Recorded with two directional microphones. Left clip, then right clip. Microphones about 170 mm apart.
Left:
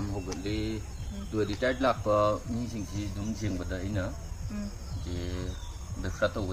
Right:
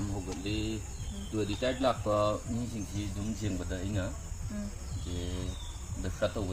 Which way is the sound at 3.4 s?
15° right (ahead or behind).